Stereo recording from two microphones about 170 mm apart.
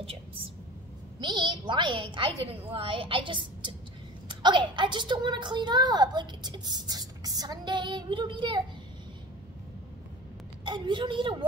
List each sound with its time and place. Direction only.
0.0 s a woman's voice: 35° right (ahead or behind)
10.6 s a woman's voice: 25° right (ahead or behind)